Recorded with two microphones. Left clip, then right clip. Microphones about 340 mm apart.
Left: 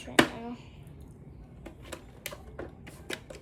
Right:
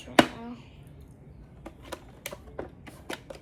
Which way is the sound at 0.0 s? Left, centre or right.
Centre.